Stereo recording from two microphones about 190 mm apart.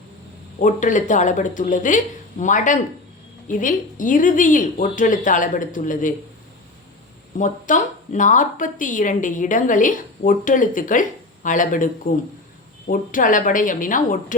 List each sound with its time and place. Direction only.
0.6 s a woman's voice: 40° left (ahead or behind)
7.3 s a woman's voice: 40° left (ahead or behind)
12.9 s a woman's voice: 45° left (ahead or behind)